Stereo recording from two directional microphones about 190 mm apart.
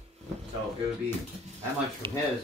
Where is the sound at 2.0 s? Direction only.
25° right (ahead or behind).